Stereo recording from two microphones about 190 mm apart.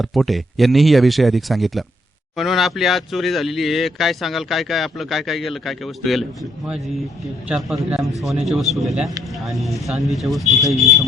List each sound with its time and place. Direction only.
0.0 s speech: centre (ahead or behind)
7.4 s speech: 5° right (ahead or behind)